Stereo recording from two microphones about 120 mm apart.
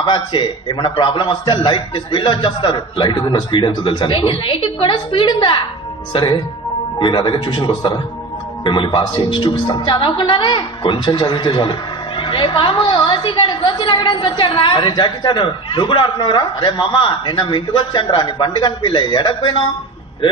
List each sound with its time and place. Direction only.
0.0 s a woman's voice: 45° left (ahead or behind)